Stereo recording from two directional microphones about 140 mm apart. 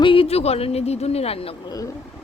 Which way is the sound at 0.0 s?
40° left (ahead or behind).